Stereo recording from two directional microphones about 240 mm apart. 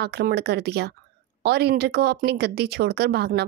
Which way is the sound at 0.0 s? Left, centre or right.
Right.